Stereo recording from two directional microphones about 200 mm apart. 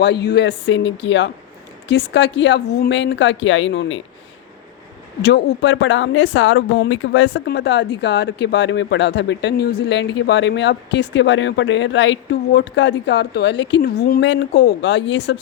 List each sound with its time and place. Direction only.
0.0 s speech: 55° left (ahead or behind)
5.2 s speech: 60° left (ahead or behind)